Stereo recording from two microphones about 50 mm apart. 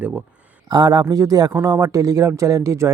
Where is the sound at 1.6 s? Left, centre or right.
Right.